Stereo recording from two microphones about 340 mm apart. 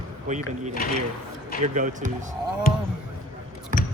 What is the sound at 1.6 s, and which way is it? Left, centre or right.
Speech, right.